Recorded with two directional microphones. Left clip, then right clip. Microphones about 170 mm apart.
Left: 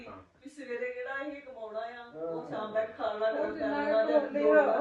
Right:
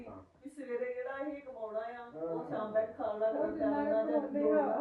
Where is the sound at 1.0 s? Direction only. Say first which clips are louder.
Left 2 dB; 40° right (ahead or behind); by 4.2 s 20° right (ahead or behind).